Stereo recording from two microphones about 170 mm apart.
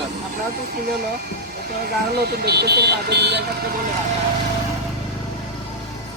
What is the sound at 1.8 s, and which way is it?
Speech, 70° right (ahead or behind).